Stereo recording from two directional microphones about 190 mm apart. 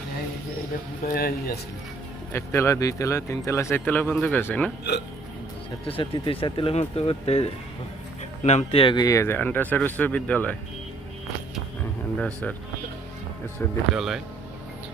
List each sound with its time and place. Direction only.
1.0 s speech: 50° left (ahead or behind)
2.3 s speech: 15° left (ahead or behind)
5.8 s speech: 30° left (ahead or behind); by 10.6 s 5° left (ahead or behind)
12.2 s speech: 5° left (ahead or behind)
13.6 s speech: 10° left (ahead or behind)
13.9 s speech: centre (ahead or behind)